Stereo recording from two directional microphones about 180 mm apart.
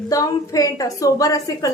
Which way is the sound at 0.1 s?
20° left (ahead or behind).